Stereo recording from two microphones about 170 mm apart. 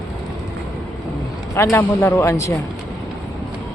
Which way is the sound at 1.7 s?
15° left (ahead or behind).